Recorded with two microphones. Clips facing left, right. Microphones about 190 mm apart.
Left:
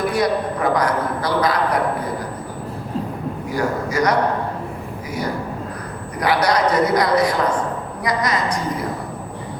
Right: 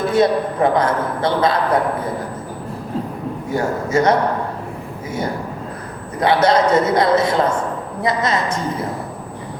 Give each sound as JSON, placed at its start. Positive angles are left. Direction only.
{"t": 0.0, "sound": "a man's voice", "side_deg": -25}
{"t": 3.5, "sound": "a man's voice", "side_deg": -25}
{"t": 6.1, "sound": "a man's voice", "side_deg": -25}